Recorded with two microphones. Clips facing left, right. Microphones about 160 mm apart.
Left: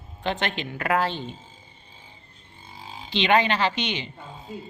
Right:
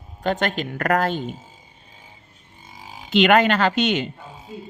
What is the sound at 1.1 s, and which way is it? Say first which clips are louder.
Speech: right 6 dB; 10° right (ahead or behind).